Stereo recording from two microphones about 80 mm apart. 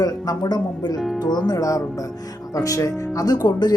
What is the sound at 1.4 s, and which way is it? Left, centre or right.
Speech, left.